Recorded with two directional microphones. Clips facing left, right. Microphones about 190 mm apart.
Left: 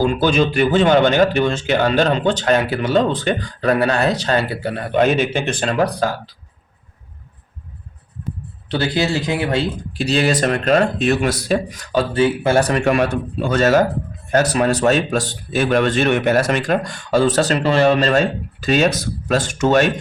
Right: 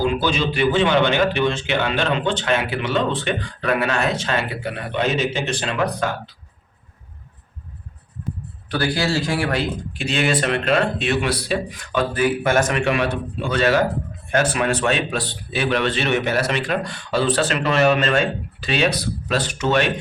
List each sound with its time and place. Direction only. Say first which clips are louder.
0.0 s a man's voice: left 4 dB; 45° left (ahead or behind)
5.7 s a man's voice: left 4 dB; 35° left (ahead or behind)
8.7 s speech: left 2 dB; 20° left (ahead or behind)
9.9 s a man's voice: left 4 dB; 35° left (ahead or behind)